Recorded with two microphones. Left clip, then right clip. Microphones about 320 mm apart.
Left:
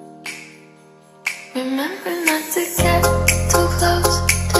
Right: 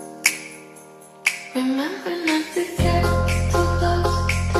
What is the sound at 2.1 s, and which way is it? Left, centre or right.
Speech, centre.